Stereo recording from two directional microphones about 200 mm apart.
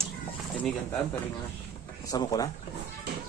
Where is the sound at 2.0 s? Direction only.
15° left (ahead or behind).